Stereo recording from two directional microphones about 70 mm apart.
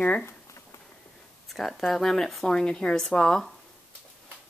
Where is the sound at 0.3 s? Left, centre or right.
Left.